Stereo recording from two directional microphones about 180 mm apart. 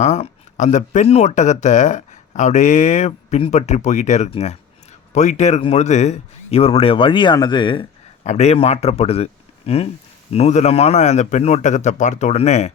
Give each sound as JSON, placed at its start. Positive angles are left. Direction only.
{"t": 0.0, "sound": "speech", "side_deg": 40}
{"t": 8.3, "sound": "speech", "side_deg": 35}